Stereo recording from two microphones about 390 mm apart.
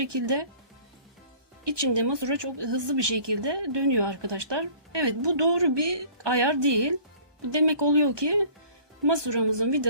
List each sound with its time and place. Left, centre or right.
0.0 s speech: right
1.6 s speech: right